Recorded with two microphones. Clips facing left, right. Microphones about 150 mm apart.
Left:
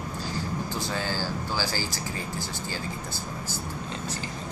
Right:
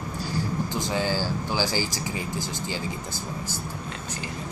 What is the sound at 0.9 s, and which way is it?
Speech, 15° right (ahead or behind).